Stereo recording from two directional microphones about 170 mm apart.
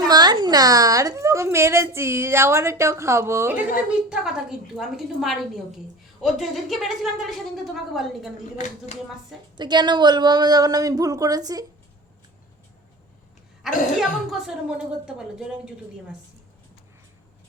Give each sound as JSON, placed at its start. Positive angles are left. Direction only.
{"t": 0.0, "sound": "a woman's voice", "side_deg": -25}
{"t": 4.1, "sound": "a woman's voice", "side_deg": -5}
{"t": 9.6, "sound": "speech", "side_deg": -25}
{"t": 13.6, "sound": "a woman's voice", "side_deg": 0}